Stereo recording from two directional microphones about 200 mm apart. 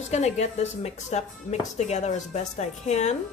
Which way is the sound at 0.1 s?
35° left (ahead or behind).